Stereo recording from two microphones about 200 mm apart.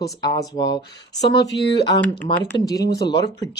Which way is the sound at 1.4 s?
60° left (ahead or behind).